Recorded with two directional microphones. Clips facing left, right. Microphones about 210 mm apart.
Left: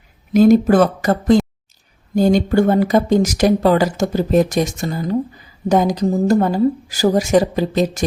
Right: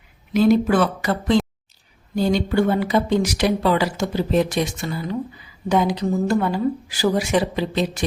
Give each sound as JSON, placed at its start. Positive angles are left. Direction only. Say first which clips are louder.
{"t": 0.3, "sound": "speech", "louder": "left 5 dB", "side_deg": 45}